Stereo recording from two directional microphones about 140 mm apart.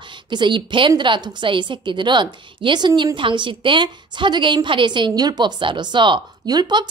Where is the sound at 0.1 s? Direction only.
35° right (ahead or behind).